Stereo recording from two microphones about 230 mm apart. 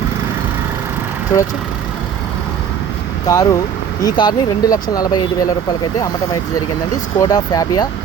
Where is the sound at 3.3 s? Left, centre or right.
Centre.